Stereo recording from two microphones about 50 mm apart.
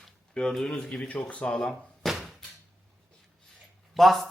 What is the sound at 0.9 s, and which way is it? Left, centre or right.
Speech, left.